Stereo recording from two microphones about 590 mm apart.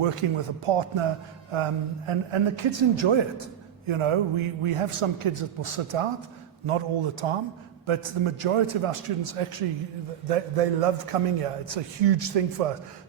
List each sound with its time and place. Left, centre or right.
0.0 s a man's voice: right
10.2 s a man's voice: right